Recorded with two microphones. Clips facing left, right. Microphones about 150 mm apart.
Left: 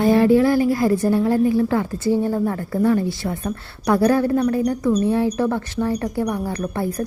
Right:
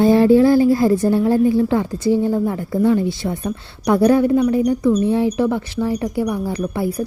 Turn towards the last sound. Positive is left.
turn(degrees=-10)  # may be behind; listen again after turning